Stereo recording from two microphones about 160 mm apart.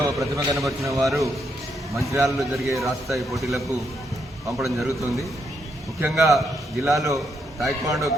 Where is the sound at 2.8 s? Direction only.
Centre (ahead or behind).